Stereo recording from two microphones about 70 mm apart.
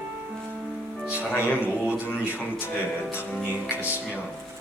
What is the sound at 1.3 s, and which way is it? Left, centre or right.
Speech, left.